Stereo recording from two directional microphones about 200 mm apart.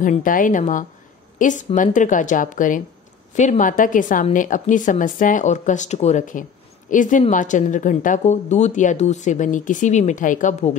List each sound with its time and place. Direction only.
0.0 s speech: 40° left (ahead or behind)